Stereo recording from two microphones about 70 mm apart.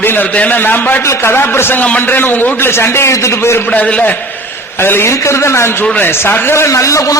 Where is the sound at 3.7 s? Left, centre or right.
Centre.